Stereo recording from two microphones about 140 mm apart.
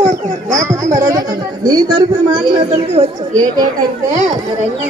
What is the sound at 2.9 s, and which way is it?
Speech, 50° right (ahead or behind).